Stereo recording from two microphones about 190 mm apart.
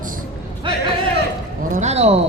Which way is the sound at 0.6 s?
25° right (ahead or behind).